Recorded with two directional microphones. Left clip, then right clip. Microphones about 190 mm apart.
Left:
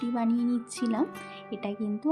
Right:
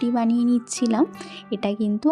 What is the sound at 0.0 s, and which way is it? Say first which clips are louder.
Speech: right 7 dB; 35° right (ahead or behind).